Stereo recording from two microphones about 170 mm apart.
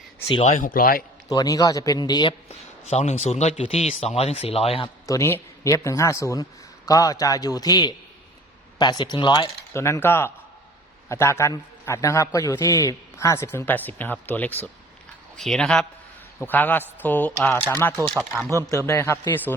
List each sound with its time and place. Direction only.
0.3 s speech: 35° left (ahead or behind); by 1.0 s 55° left (ahead or behind)
1.3 s a man's voice: 20° left (ahead or behind)
2.5 s speech: 40° left (ahead or behind)
5.0 s a man's voice: 15° left (ahead or behind)
9.8 s a man's voice: 15° left (ahead or behind)
18.2 s a man's voice: 5° right (ahead or behind)
18.7 s a man's voice: 15° left (ahead or behind)